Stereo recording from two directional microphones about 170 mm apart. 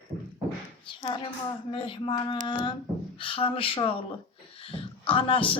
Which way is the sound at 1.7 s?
30° left (ahead or behind).